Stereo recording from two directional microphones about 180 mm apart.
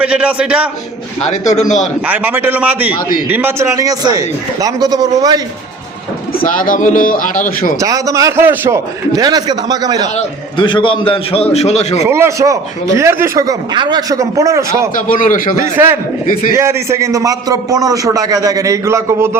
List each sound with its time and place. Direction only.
0.0 s speech: 5° right (ahead or behind)
1.2 s a man's voice: 40° left (ahead or behind)
2.0 s a man's voice: 10° right (ahead or behind)
6.4 s a man's voice: 50° left (ahead or behind)
7.8 s a man's voice: 20° right (ahead or behind)
10.2 s a man's voice: 25° left (ahead or behind)
12.0 s speech: 15° right (ahead or behind)
14.9 s a man's voice: 50° left (ahead or behind)
15.8 s a man's voice: 15° right (ahead or behind)